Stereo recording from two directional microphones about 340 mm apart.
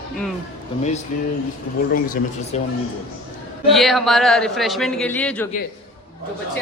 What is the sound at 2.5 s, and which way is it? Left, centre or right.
Speech, centre.